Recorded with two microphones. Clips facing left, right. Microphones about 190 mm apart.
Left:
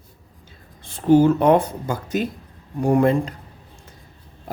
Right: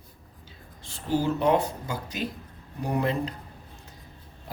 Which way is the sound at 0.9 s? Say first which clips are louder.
Left 12 dB; 55° left (ahead or behind).